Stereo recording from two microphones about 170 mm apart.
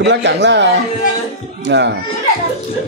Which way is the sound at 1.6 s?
90° right.